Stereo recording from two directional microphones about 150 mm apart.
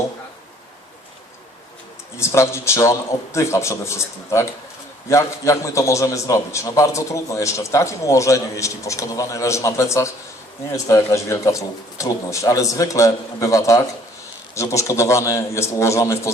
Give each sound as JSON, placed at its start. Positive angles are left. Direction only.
{"t": 2.1, "sound": "a man's voice", "side_deg": 20}